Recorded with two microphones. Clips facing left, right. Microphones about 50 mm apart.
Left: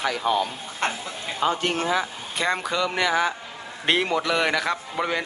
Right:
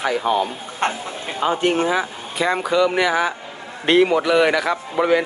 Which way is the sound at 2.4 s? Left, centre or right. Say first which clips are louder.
Right 6 dB; centre.